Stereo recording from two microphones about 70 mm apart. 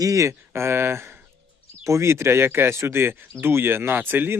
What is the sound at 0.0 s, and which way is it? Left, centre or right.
Speech, right.